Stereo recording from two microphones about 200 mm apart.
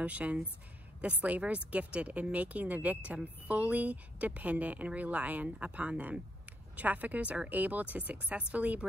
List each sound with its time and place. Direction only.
0.0 s speech: 5° right (ahead or behind)